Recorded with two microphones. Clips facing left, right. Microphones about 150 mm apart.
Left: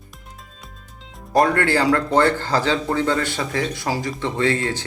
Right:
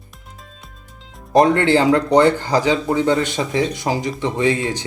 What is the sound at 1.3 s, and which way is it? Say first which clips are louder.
Speech: right 4 dB; 20° right (ahead or behind).